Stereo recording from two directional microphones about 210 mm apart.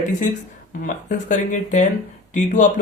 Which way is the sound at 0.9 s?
40° left (ahead or behind).